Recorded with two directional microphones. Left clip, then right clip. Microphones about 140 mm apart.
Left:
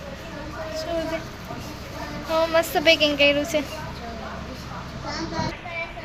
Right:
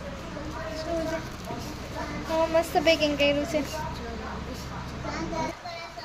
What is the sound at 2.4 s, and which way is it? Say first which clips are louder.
Speech: left 3 dB; centre (ahead or behind).